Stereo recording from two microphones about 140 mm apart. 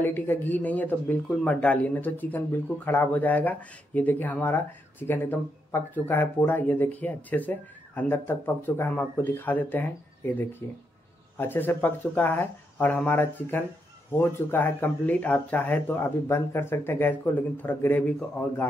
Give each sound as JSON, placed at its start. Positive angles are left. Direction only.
{"t": 0.0, "sound": "speech", "side_deg": 15}